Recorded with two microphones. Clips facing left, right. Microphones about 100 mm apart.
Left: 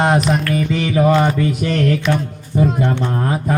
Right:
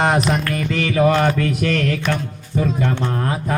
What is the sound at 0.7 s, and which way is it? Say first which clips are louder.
Mantra: left 1 dB; 20° left (ahead or behind).